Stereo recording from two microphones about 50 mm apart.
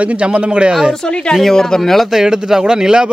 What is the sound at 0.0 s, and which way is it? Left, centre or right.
Speech, right.